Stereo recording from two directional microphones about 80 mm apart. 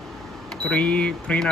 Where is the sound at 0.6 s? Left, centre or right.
Centre.